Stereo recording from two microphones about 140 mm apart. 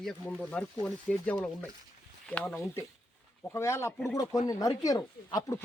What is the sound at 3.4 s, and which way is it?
Speech, 20° left (ahead or behind).